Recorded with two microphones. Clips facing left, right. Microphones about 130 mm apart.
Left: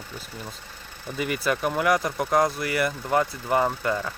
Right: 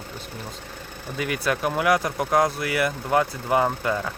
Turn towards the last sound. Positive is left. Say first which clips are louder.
# right 1 dB
turn(degrees=-5)  # may be behind; listen again after turning